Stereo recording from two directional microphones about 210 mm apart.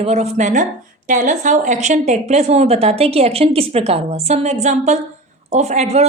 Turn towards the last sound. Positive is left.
turn(degrees=-30)  # may be behind; listen again after turning